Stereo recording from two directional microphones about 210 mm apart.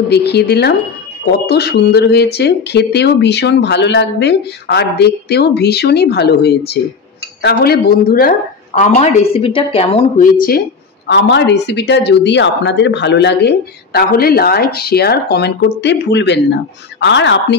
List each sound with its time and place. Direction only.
0.1 s a woman's voice: 50° left (ahead or behind); by 10.3 s 35° left (ahead or behind)
11.1 s a woman's voice: 55° left (ahead or behind)